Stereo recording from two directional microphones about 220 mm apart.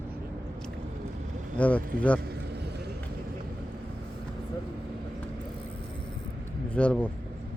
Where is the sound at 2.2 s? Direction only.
45° right (ahead or behind).